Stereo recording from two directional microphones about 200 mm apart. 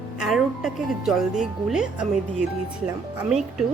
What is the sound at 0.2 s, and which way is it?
Speech, centre (ahead or behind).